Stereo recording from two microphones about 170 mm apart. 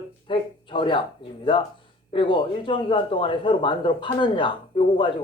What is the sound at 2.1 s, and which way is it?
A man's voice, 30° left (ahead or behind).